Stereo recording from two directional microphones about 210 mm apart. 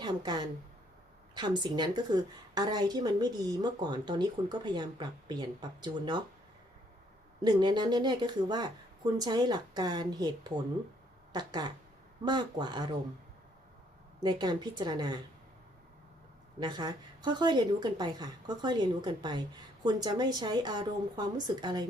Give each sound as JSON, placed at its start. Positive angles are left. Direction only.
{"t": 0.0, "sound": "a woman's voice", "side_deg": -20}
{"t": 7.4, "sound": "a woman's voice", "side_deg": -20}
{"t": 14.2, "sound": "a woman's voice", "side_deg": -20}
{"t": 16.6, "sound": "a woman's voice", "side_deg": -20}